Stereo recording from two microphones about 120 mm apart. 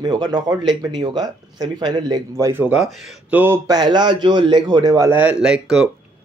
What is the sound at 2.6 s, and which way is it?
Speech, 10° right (ahead or behind).